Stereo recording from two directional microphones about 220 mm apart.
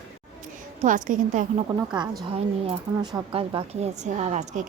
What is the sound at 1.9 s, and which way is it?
A woman's voice, 20° right (ahead or behind).